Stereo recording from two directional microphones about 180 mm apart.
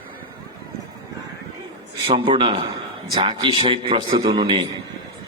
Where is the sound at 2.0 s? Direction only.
30° right (ahead or behind).